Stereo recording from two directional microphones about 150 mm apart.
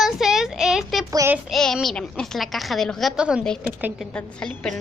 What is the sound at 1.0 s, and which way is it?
Child singing, 20° right (ahead or behind).